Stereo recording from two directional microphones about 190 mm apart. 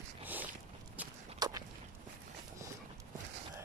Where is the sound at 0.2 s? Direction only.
10° right (ahead or behind).